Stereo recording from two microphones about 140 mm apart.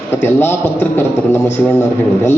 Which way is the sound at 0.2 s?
15° left (ahead or behind).